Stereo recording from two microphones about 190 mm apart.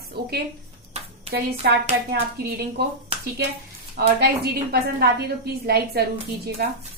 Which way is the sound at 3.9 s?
55° right (ahead or behind).